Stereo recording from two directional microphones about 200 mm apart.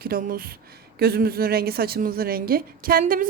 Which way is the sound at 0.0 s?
45° right (ahead or behind).